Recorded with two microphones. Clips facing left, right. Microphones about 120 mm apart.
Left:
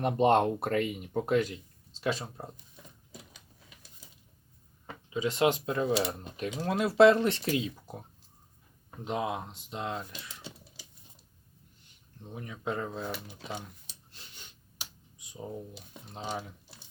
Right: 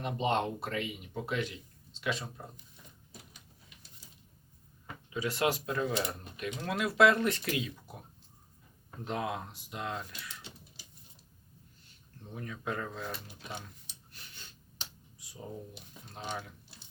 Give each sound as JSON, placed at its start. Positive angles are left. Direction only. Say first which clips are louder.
{"t": 0.0, "sound": "speech", "louder": "left 7 dB", "side_deg": 50}
{"t": 4.9, "sound": "speech", "louder": "left 4 dB", "side_deg": 20}
{"t": 9.0, "sound": "speech", "louder": "left 3 dB", "side_deg": 20}
{"t": 12.2, "sound": "speech", "louder": "left 2 dB", "side_deg": 20}
{"t": 14.1, "sound": "a sound", "louder": "even", "side_deg": 25}